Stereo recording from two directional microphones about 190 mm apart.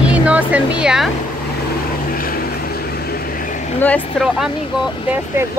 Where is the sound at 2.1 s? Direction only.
50° left (ahead or behind).